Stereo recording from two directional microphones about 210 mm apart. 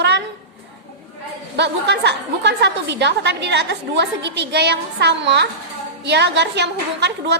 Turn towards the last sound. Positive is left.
turn(degrees=-55)  # may be behind; listen again after turning